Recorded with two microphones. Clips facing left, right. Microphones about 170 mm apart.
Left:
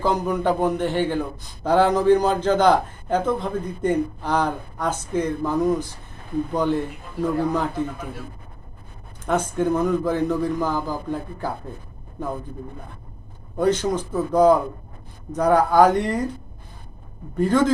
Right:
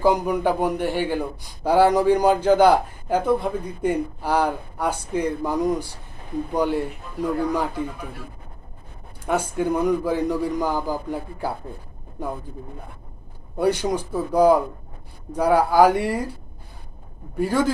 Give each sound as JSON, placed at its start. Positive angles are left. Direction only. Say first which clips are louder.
{"t": 0.0, "sound": "a man's voice", "louder": "right 2 dB", "side_deg": -10}
{"t": 9.2, "sound": "a man's voice", "louder": "left 1 dB", "side_deg": -10}
{"t": 13.6, "sound": "a man's voice", "louder": "left 1 dB", "side_deg": -10}
{"t": 17.3, "sound": "a man's voice", "louder": "left 3 dB", "side_deg": -10}